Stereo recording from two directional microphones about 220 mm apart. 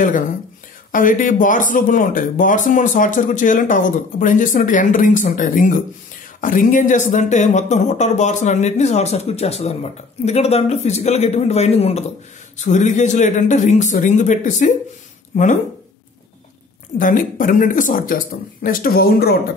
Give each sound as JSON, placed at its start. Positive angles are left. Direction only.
{"t": 0.9, "sound": "speech", "side_deg": 35}
{"t": 17.0, "sound": "speech", "side_deg": 35}